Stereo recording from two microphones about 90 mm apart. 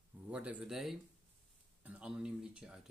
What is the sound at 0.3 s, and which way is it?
Speech, 15° right (ahead or behind).